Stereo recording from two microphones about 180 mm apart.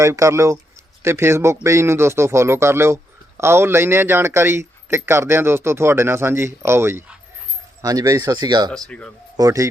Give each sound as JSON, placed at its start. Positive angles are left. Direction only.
{"t": 0.0, "sound": "speech", "side_deg": -15}
{"t": 8.7, "sound": "speech", "side_deg": 5}
{"t": 9.4, "sound": "speech", "side_deg": -15}